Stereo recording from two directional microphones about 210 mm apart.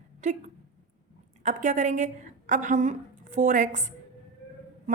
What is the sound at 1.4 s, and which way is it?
A woman's voice, 35° right (ahead or behind).